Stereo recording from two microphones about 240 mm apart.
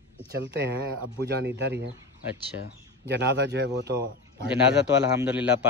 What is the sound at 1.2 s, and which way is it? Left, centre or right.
Speech, right.